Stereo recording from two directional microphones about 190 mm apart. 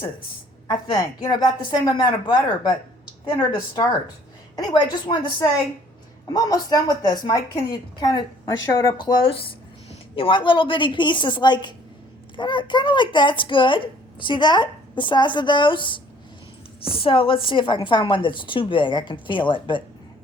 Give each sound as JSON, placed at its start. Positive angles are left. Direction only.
{"t": 0.7, "sound": "speech", "side_deg": 20}
{"t": 4.5, "sound": "speech", "side_deg": 20}